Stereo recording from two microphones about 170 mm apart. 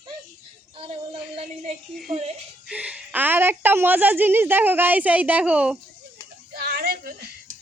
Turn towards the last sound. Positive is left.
turn(degrees=-60)  # may be behind; listen again after turning